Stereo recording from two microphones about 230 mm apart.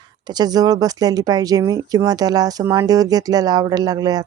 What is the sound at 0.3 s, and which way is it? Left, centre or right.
Speech, centre.